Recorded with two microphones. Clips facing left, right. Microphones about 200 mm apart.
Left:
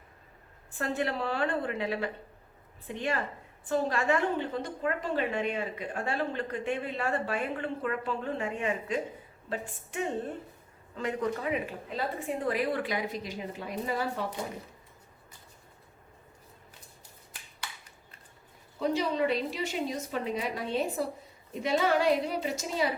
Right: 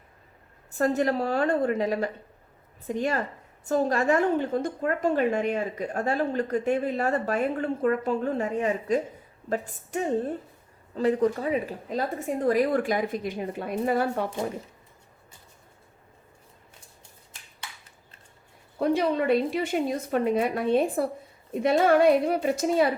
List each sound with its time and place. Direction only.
0.7 s a woman's voice: 40° right (ahead or behind)
18.8 s a woman's voice: 55° right (ahead or behind)